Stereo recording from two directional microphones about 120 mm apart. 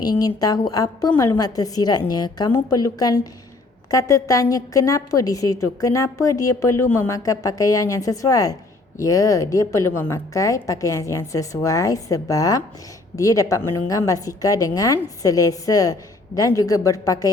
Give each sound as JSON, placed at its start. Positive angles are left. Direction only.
{"t": 0.0, "sound": "a woman's voice", "side_deg": 35}